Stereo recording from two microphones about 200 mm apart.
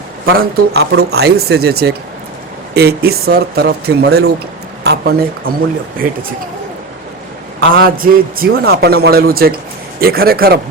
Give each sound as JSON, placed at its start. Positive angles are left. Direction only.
{"t": 0.3, "sound": "speech", "side_deg": -50}
{"t": 7.8, "sound": "speech", "side_deg": -45}